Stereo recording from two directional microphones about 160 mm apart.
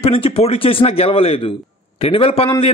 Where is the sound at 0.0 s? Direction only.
40° left (ahead or behind).